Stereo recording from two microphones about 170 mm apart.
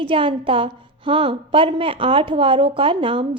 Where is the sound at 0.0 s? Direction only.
30° right (ahead or behind).